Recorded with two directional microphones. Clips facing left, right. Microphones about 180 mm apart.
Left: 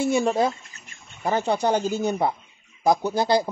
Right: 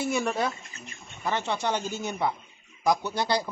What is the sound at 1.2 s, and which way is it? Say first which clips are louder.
Speech: left 6 dB; 35° left (ahead or behind).